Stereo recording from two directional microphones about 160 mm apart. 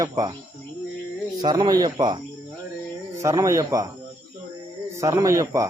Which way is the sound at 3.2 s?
20° right (ahead or behind).